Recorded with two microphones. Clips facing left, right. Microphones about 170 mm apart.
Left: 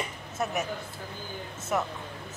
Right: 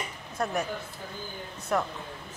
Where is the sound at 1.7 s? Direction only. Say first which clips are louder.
Right 1 dB; 10° left (ahead or behind).